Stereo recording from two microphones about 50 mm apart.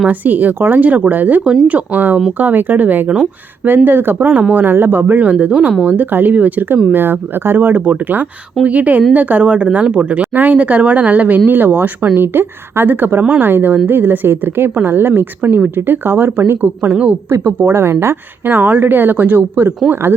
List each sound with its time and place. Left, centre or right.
0.1 s a woman's voice: right
6.9 s a woman's voice: right
16.9 s speech: right
17.2 s speech: right
18.5 s a woman's voice: right